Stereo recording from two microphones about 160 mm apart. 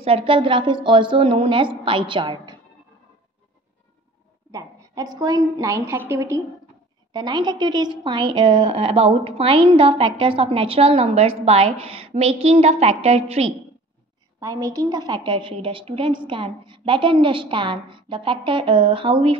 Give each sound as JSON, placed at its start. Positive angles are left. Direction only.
{"t": 0.0, "sound": "a woman's voice", "side_deg": -35}
{"t": 4.5, "sound": "a woman's voice", "side_deg": -20}
{"t": 7.1, "sound": "a woman's voice", "side_deg": -30}
{"t": 14.4, "sound": "a woman's voice", "side_deg": -20}